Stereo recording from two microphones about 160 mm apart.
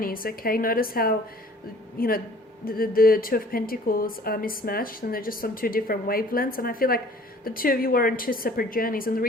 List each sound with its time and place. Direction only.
0.0 s a woman's voice: 65° left (ahead or behind)